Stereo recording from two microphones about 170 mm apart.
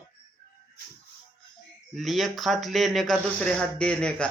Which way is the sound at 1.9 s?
Centre (ahead or behind).